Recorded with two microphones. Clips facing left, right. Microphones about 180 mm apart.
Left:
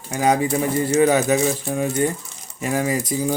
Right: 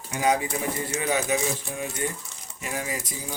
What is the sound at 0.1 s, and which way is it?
Speech, 35° left (ahead or behind).